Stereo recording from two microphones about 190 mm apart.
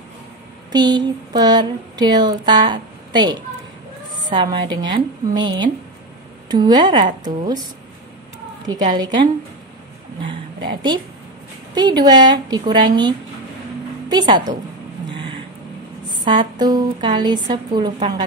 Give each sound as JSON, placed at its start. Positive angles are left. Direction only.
{"t": 0.7, "sound": "speech", "side_deg": -20}
{"t": 8.6, "sound": "speech", "side_deg": -20}
{"t": 10.7, "sound": "a woman's voice", "side_deg": -20}
{"t": 15.0, "sound": "a sound", "side_deg": -25}
{"t": 16.5, "sound": "speech", "side_deg": -20}